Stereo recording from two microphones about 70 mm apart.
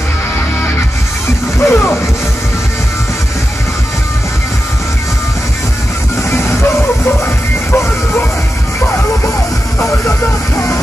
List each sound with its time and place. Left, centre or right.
1.6 s speech: left
6.3 s music: left
7.7 s music: left
9.8 s music: left